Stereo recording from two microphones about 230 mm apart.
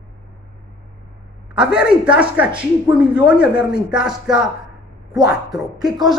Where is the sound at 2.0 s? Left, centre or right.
Centre.